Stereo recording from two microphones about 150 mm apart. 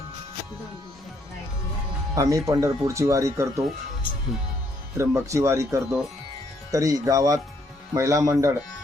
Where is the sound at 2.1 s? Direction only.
20° right (ahead or behind).